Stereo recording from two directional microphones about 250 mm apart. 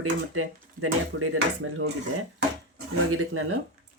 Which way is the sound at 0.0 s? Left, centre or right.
Right.